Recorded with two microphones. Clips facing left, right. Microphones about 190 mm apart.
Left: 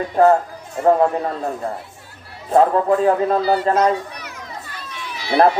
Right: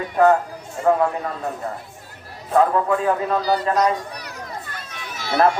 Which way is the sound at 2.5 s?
30° left (ahead or behind).